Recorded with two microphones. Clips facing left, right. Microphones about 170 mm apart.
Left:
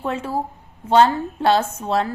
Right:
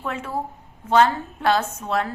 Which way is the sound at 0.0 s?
30° left (ahead or behind).